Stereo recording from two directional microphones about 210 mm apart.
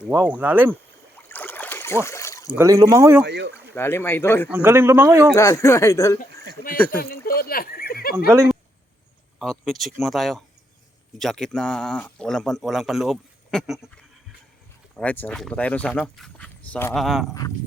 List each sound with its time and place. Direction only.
0.0 s speech: 5° right (ahead or behind)
1.1 s boat: 10° left (ahead or behind)
2.0 s a sound: 15° left (ahead or behind)
2.6 s speech: 15° right (ahead or behind)
3.2 s speech: 55° right (ahead or behind)
3.8 s speech: 10° left (ahead or behind)
4.4 s speech: 10° right (ahead or behind)
5.3 s speech: 15° left (ahead or behind)
6.9 s speech: 45° left (ahead or behind)
9.4 s speech: centre (ahead or behind)
14.9 s speech: 10° left (ahead or behind)